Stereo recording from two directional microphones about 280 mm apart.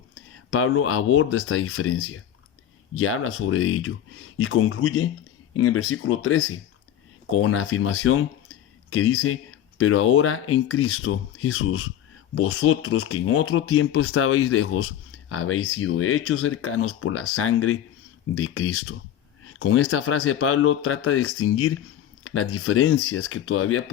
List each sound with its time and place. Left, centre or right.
0.6 s speech: left